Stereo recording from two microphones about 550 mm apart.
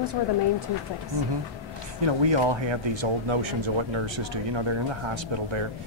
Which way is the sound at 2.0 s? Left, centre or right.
Right.